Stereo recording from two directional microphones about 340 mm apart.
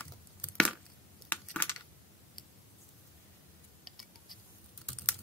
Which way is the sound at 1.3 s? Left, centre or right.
Centre.